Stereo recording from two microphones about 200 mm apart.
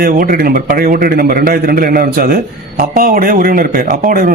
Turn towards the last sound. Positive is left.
turn(degrees=-45)  # may be behind; listen again after turning